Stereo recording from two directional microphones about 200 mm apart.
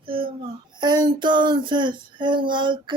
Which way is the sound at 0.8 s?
20° right (ahead or behind).